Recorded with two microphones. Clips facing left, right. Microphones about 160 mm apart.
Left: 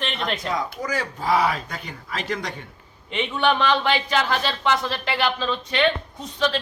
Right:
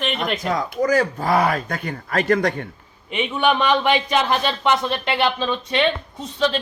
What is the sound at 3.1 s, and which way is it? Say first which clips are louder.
A man's voice: right 2 dB; 15° right (ahead or behind).